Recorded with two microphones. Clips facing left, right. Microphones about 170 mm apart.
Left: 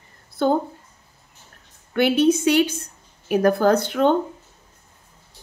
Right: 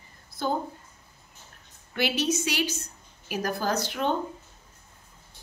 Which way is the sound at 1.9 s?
55° left (ahead or behind).